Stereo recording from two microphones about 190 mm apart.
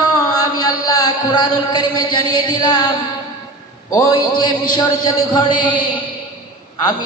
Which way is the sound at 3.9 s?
20° left (ahead or behind).